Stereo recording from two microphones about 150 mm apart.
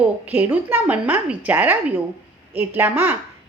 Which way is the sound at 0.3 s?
10° right (ahead or behind).